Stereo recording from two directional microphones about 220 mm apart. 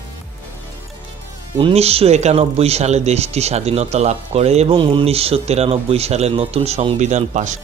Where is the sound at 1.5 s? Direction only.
25° right (ahead or behind).